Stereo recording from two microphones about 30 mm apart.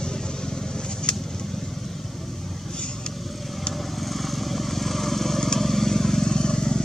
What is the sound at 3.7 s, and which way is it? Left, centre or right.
Vehicle, centre.